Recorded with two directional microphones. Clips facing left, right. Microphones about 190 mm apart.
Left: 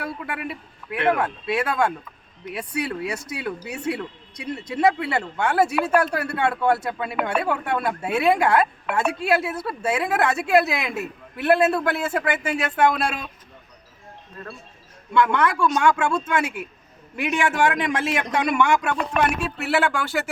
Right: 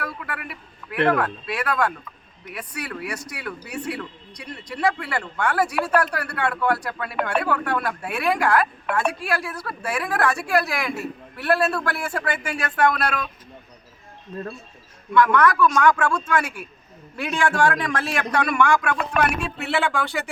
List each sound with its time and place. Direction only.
0.0 s a sound: 25° left (ahead or behind)
1.1 s speech: 25° left (ahead or behind)
15.1 s speech: 25° left (ahead or behind)
19.5 s speech: centre (ahead or behind)